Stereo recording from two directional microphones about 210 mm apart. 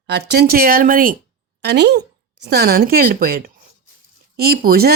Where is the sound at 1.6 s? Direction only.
50° right (ahead or behind).